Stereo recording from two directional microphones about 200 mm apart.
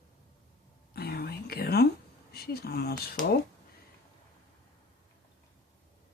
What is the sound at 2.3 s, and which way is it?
Speech, 50° left (ahead or behind).